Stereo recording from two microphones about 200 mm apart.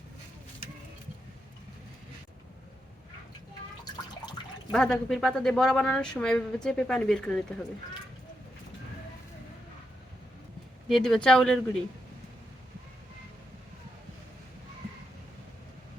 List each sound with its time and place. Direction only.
4.7 s speech: 5° left (ahead or behind)
10.8 s speech: centre (ahead or behind)